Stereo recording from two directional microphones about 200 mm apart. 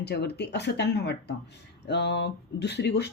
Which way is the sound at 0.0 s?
55° left (ahead or behind).